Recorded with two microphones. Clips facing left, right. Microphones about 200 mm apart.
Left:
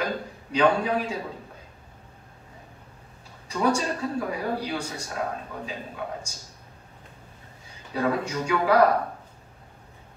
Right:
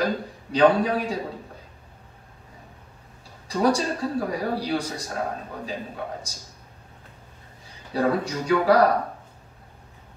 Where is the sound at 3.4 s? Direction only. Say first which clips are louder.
Right 3 dB; 35° right (ahead or behind).